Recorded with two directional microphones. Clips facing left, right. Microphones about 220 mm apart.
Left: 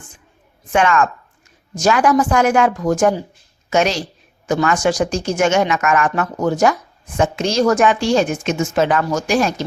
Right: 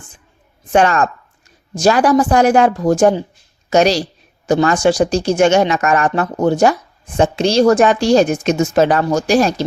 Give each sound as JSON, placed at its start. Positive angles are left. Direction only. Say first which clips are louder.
{"t": 0.7, "sound": "speech", "louder": "right 2 dB", "side_deg": -35}